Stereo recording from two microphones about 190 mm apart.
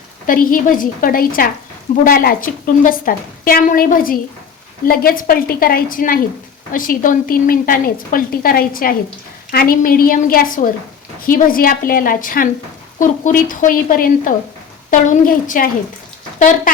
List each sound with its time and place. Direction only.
0.3 s a woman's voice: 45° left (ahead or behind)